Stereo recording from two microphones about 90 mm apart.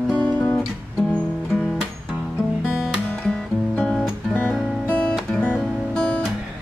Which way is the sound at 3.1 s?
10° left (ahead or behind).